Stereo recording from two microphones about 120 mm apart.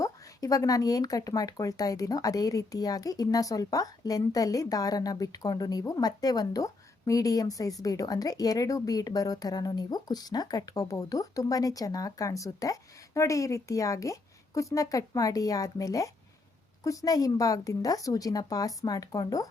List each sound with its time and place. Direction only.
0.0 s speech: 30° left (ahead or behind)